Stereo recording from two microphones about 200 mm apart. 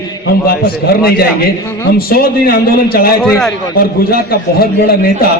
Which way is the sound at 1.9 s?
50° left (ahead or behind).